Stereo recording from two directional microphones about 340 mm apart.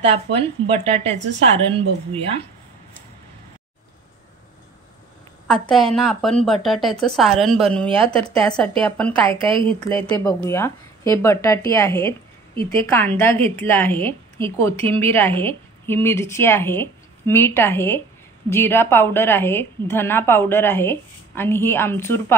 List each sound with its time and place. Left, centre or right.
0.0 s speech: centre
5.5 s a woman's voice: centre